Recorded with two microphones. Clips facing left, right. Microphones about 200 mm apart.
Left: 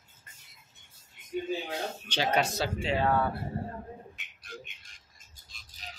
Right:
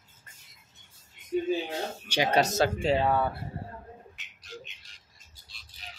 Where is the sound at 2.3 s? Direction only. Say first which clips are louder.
Right 4 dB; 40° right (ahead or behind).